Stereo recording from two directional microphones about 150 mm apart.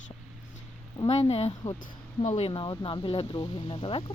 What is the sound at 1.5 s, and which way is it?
Speech, 20° left (ahead or behind).